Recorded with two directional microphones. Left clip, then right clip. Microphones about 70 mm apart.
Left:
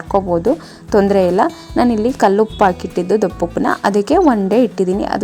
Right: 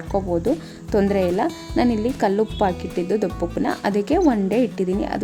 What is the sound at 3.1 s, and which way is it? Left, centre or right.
Speech, left.